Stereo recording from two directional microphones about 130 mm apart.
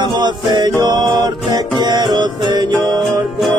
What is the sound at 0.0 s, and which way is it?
Music, 35° right (ahead or behind).